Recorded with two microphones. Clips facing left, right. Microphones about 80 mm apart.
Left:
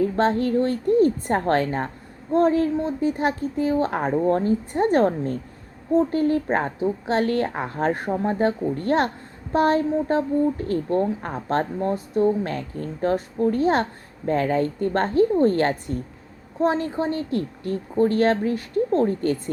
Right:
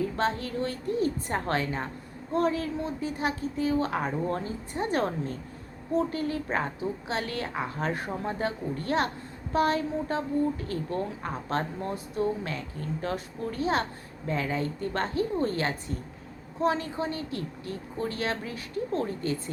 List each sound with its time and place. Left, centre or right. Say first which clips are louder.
0.0 s a woman's voice: left 8 dB; left